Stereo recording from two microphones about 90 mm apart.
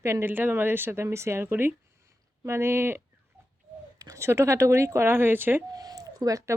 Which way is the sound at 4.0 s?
40° right (ahead or behind).